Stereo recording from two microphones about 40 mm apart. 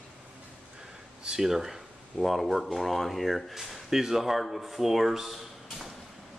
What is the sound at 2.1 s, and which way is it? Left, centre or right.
Speech, centre.